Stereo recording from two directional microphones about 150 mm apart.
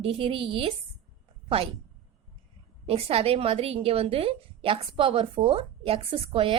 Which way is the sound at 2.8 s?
40° right (ahead or behind).